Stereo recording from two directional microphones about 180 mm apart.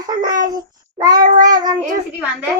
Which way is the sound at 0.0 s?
20° right (ahead or behind).